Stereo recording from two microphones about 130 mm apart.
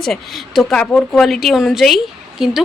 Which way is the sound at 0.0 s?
Centre (ahead or behind).